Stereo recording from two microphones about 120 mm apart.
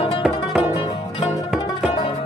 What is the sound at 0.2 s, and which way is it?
Music, 10° right (ahead or behind).